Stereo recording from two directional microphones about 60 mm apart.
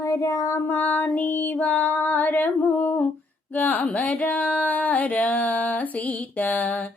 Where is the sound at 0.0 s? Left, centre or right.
Left.